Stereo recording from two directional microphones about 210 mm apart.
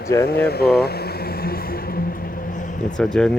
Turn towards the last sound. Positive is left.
turn(degrees=5)  # may be behind; listen again after turning